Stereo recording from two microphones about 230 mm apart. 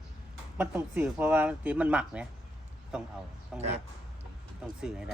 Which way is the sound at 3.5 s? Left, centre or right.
Centre.